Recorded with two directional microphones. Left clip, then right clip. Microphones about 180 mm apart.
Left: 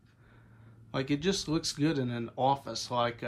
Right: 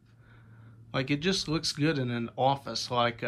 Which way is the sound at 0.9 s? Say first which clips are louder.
Right 2 dB; 10° left (ahead or behind).